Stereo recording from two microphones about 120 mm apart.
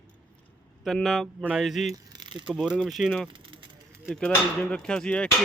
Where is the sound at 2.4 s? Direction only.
5° right (ahead or behind).